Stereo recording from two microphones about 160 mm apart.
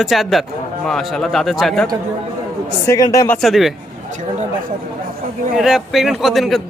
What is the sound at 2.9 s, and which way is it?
Speech, 20° left (ahead or behind).